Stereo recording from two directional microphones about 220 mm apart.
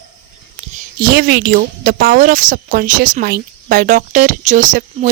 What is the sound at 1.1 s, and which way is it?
A woman's voice, 45° right (ahead or behind).